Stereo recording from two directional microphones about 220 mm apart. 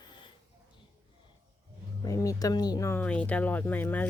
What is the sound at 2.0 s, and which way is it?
Speech, 15° left (ahead or behind).